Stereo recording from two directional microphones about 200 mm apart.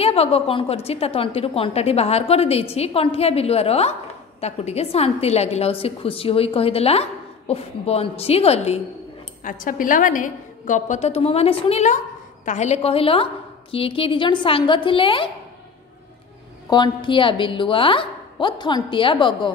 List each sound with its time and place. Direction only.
0.0 s a woman's voice: 30° left (ahead or behind)
9.4 s a woman's voice: 40° left (ahead or behind); by 15.2 s 25° left (ahead or behind)
16.6 s a woman's voice: 20° left (ahead or behind)